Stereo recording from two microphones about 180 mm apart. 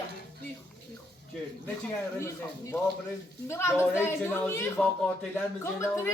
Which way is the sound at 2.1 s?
15° left (ahead or behind).